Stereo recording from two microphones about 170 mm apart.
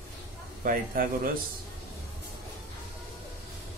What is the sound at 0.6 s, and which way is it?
Speech, 55° right (ahead or behind).